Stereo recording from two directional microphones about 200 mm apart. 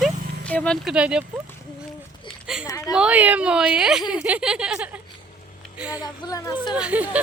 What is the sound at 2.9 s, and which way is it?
Speech, 5° right (ahead or behind).